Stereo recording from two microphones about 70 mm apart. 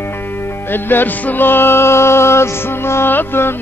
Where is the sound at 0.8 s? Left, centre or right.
Left.